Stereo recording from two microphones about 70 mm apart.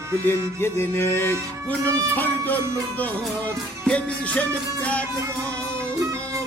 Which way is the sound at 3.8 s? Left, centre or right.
Centre.